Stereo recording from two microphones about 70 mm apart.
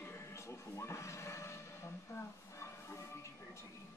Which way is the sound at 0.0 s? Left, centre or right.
Left.